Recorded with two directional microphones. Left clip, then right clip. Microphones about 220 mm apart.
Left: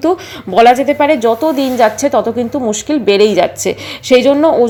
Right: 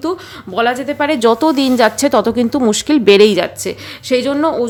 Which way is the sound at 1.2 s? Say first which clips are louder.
Even; 20° right (ahead or behind).